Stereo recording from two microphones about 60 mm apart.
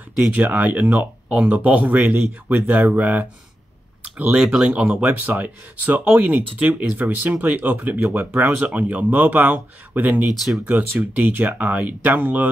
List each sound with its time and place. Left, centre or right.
0.3 s speech: right
4.4 s speech: centre
4.6 s speech: right